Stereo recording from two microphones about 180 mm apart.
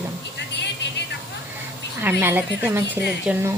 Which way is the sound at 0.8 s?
75° left (ahead or behind).